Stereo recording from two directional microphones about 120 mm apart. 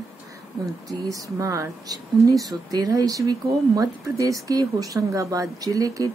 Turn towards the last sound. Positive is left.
turn(degrees=-30)  # may be behind; listen again after turning